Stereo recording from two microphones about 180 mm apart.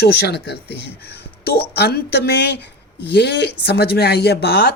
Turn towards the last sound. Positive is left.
turn(degrees=65)  # may be behind; listen again after turning